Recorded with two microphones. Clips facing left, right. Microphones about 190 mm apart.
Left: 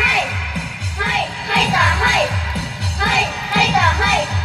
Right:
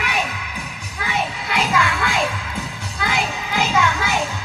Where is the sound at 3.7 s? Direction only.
35° left (ahead or behind).